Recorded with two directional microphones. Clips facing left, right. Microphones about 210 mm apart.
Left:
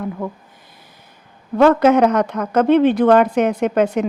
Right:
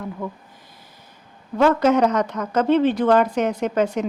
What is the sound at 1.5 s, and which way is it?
Speech, 60° left (ahead or behind).